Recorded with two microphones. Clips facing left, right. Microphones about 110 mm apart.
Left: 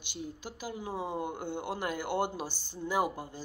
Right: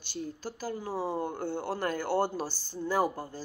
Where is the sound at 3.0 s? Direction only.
40° right (ahead or behind).